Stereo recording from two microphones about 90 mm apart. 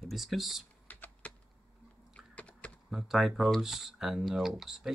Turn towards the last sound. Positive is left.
turn(degrees=-5)  # may be behind; listen again after turning